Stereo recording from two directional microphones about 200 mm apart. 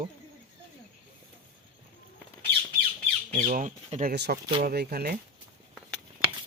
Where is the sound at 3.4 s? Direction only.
40° right (ahead or behind).